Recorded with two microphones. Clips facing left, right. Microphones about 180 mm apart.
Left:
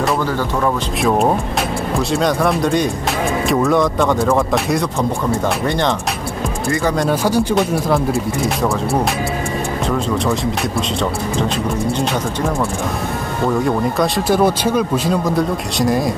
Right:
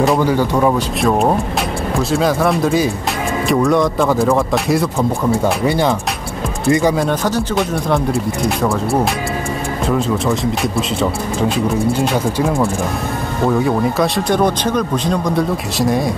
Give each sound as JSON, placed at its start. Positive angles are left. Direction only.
{"t": 0.2, "sound": "speech", "side_deg": -15}
{"t": 1.0, "sound": "speech", "side_deg": 0}
{"t": 7.0, "sound": "speech", "side_deg": 10}
{"t": 13.5, "sound": "speech", "side_deg": 0}